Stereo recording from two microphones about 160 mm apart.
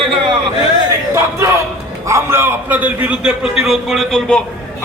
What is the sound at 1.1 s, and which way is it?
A man's voice, 15° right (ahead or behind).